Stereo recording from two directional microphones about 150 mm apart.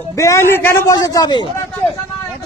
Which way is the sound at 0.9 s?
25° left (ahead or behind).